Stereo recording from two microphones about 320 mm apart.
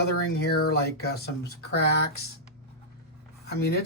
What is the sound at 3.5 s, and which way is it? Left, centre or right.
Speech, left.